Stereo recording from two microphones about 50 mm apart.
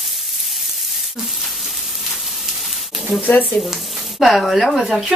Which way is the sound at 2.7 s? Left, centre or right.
Centre.